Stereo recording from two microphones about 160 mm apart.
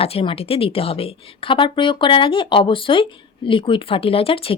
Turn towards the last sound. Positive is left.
turn(degrees=35)  # may be behind; listen again after turning